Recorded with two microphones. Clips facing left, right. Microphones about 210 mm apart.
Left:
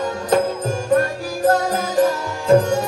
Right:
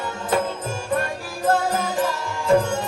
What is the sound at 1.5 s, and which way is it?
Music, 40° left (ahead or behind).